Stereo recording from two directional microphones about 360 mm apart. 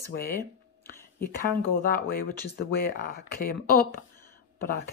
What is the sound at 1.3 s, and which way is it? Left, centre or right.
Speech, left.